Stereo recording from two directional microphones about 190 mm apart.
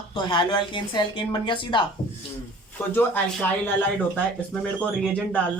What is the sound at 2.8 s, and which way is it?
Speech, 10° left (ahead or behind).